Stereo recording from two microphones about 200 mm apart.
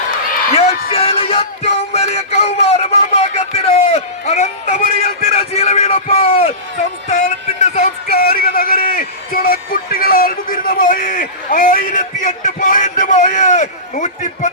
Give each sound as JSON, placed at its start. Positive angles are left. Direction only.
{"t": 0.9, "sound": "music", "side_deg": 30}
{"t": 5.3, "sound": "a man's voice", "side_deg": 30}
{"t": 7.1, "sound": "music", "side_deg": 35}
{"t": 8.0, "sound": "a man's voice", "side_deg": 50}